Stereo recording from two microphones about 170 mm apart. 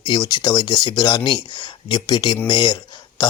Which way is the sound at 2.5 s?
25° left (ahead or behind).